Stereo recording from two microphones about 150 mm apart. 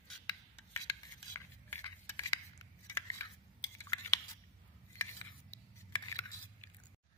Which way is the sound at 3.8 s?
20° left (ahead or behind).